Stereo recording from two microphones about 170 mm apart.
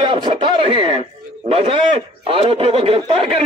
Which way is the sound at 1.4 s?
35° right (ahead or behind).